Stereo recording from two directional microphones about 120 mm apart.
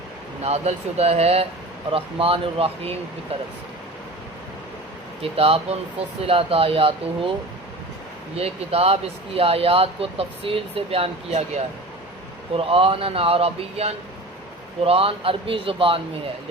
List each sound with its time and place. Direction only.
0.4 s speech: 60° right (ahead or behind)
5.2 s speech: 55° right (ahead or behind)
8.4 s speech: 55° right (ahead or behind)
12.5 s speech: 50° right (ahead or behind)